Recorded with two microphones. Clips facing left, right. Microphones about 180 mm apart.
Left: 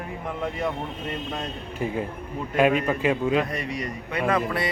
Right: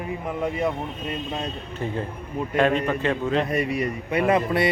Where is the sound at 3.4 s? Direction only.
25° right (ahead or behind).